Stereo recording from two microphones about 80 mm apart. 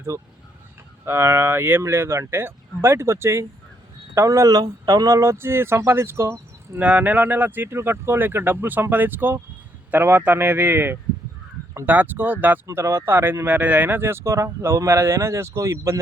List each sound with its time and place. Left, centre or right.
0.1 s speech: right
6.7 s speech: centre
12.6 s speech: right